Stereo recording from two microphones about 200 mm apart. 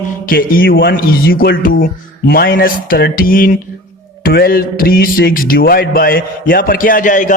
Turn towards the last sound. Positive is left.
turn(degrees=40)  # may be behind; listen again after turning